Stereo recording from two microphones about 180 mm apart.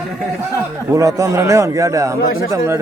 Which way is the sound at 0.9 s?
20° right (ahead or behind).